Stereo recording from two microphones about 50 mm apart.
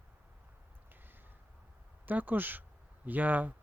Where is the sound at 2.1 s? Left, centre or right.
Right.